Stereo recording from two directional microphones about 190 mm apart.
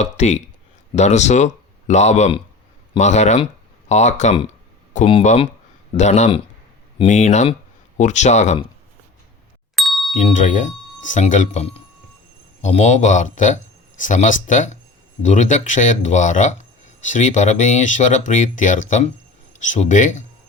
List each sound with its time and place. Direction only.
0.0 s speech: 35° left (ahead or behind)
9.7 s ding: centre (ahead or behind)
10.2 s speech: 40° left (ahead or behind)